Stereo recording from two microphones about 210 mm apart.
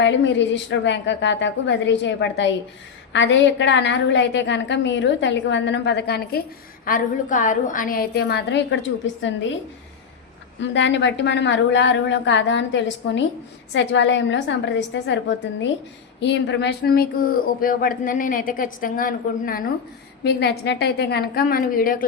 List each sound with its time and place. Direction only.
0.0 s a woman's voice: 60° left (ahead or behind)
6.8 s speech: 40° left (ahead or behind); by 9.6 s 60° left (ahead or behind)
10.6 s a woman's voice: 60° left (ahead or behind); by 22.0 s 40° left (ahead or behind)